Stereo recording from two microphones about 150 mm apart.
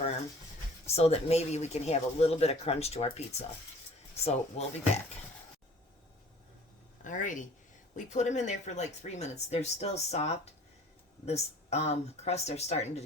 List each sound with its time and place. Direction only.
0.9 s speech: 45° left (ahead or behind)
7.0 s speech: 55° left (ahead or behind)